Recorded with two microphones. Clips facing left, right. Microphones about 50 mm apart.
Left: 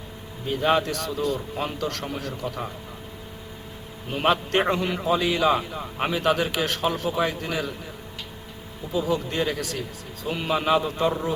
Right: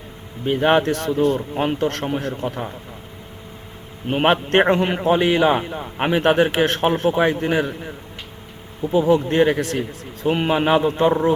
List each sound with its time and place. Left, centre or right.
0.4 s a man's voice: right
4.0 s a man's voice: right